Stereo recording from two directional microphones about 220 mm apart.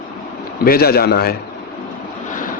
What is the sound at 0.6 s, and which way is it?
Speech, 45° left (ahead or behind).